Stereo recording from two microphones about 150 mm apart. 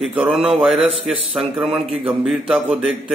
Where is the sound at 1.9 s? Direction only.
35° right (ahead or behind).